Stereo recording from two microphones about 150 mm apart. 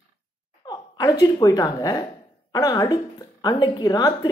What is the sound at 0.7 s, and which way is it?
A woman's voice, 25° left (ahead or behind).